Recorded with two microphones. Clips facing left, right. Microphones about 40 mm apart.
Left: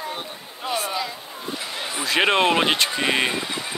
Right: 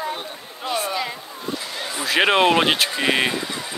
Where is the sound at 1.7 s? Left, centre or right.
Centre.